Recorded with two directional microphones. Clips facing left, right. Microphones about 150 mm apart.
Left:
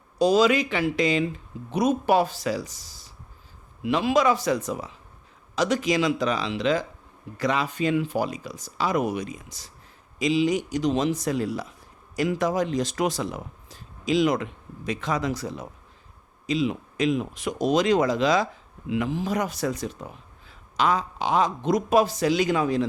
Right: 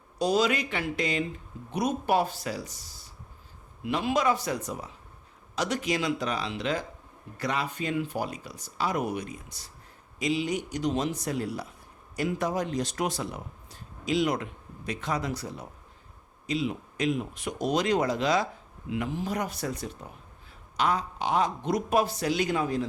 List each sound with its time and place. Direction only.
0.2 s speech: 90° left